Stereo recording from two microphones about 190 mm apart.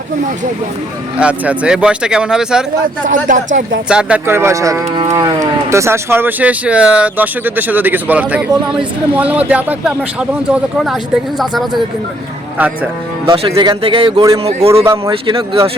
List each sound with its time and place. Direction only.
1.2 s a man's voice: 5° right (ahead or behind)
3.1 s speech: 40° right (ahead or behind)
3.8 s a man's voice: 5° right (ahead or behind)
13.2 s speech: 30° right (ahead or behind)